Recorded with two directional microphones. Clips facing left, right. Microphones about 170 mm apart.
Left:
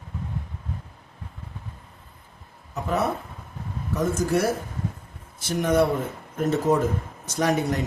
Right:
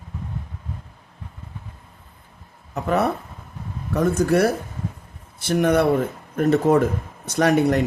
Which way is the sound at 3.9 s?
60° right (ahead or behind).